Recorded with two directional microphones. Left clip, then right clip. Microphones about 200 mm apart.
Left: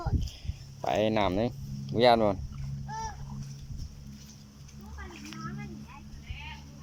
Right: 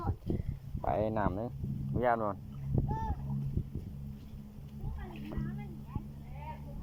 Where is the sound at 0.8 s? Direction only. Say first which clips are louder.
Left 5 dB; 10° left (ahead or behind); by 2.4 s 30° left (ahead or behind).